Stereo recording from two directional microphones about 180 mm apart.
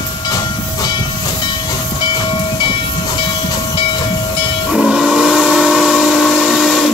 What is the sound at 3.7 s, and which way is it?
Train, 25° left (ahead or behind).